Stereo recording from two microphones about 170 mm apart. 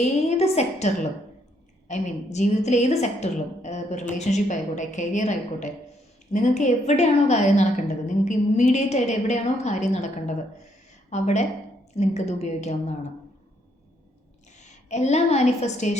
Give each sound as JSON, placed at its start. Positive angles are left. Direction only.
{"t": 0.0, "sound": "a woman's voice", "side_deg": 40}
{"t": 1.9, "sound": "a woman's voice", "side_deg": 45}
{"t": 14.8, "sound": "a woman's voice", "side_deg": 40}